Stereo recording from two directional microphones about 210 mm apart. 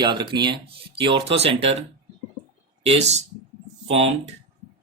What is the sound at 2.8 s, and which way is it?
Speech, 30° right (ahead or behind).